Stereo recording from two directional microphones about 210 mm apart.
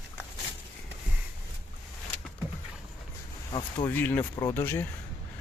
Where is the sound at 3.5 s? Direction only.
20° left (ahead or behind).